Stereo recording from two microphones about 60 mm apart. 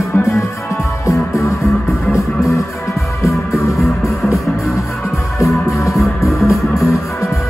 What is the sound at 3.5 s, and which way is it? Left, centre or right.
Music, left.